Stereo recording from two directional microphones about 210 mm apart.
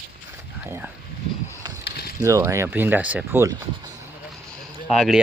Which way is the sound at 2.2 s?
15° right (ahead or behind).